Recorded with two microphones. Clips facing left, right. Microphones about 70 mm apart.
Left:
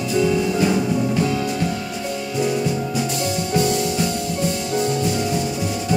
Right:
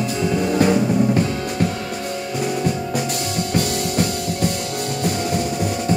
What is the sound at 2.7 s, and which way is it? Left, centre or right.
Music, right.